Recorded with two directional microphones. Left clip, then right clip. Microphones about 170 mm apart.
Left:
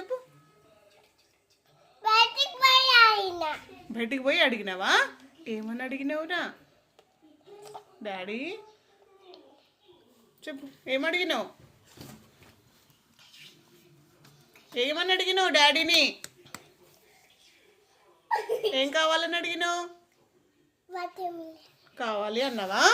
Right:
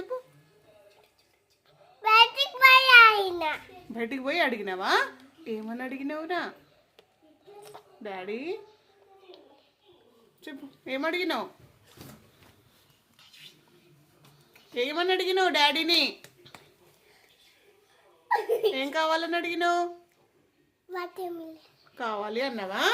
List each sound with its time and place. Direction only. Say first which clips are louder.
0.1 s music: left 2 dB; centre (ahead or behind)
2.0 s child singing: right 3 dB; 20° right (ahead or behind)
3.9 s a woman's voice: left 3 dB; centre (ahead or behind)
7.6 s a sound: left 3 dB; 5° right (ahead or behind)
10.4 s a woman's voice: left 3 dB; 10° right (ahead or behind)
14.7 s a woman's voice: even; 5° right (ahead or behind)
18.7 s a woman's voice: left 2 dB; 5° right (ahead or behind)
20.9 s a child's voice: left 1 dB; 20° right (ahead or behind)
21.5 s a woman's voice: even; 5° right (ahead or behind)